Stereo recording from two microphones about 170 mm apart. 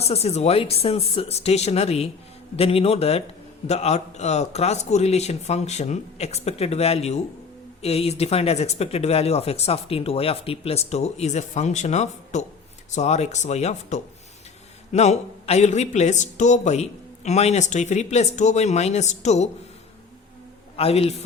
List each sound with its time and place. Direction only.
0.0 s speech: 40° left (ahead or behind)
20.7 s speech: 35° left (ahead or behind)